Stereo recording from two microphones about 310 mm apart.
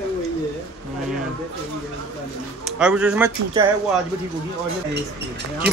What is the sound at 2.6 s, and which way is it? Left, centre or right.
Speech, centre.